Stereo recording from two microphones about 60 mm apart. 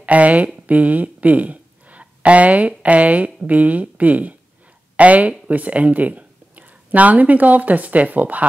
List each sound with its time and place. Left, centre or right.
0.0 s speech: right
0.7 s a sound: right
2.8 s speech: right